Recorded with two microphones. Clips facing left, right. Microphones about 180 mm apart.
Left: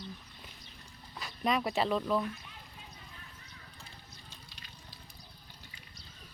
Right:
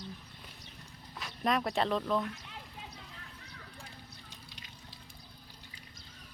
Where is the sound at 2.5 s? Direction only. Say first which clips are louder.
Right 4 dB; 80° right.